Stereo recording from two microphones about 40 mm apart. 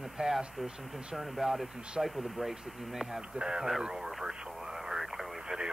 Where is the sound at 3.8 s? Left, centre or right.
Centre.